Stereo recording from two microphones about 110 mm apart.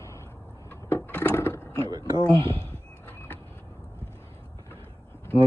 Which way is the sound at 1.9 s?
35° right (ahead or behind).